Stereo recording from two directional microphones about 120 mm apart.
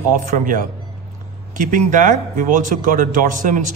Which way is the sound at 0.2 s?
85° right.